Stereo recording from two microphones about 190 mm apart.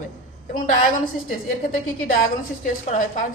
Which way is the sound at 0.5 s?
45° left (ahead or behind).